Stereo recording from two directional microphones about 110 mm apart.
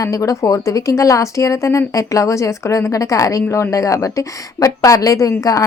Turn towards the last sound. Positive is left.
turn(degrees=30)  # may be behind; listen again after turning